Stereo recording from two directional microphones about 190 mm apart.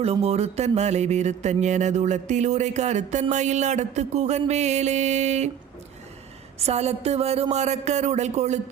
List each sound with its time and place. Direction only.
0.0 s speech: 35° right (ahead or behind)
6.6 s speech: 35° right (ahead or behind)